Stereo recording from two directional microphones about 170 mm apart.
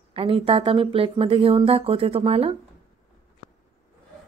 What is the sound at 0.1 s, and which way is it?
Speech, 30° right (ahead or behind).